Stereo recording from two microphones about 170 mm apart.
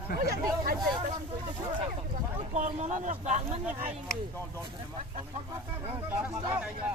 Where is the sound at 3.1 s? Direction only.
45° right (ahead or behind).